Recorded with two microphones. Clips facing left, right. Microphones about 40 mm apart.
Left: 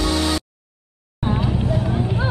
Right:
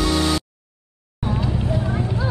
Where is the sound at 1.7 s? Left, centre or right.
Centre.